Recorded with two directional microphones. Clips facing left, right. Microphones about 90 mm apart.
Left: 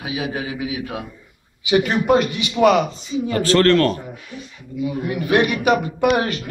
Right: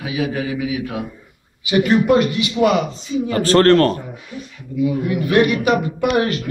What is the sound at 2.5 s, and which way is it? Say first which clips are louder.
Speech: left 2 dB; 35° left (ahead or behind).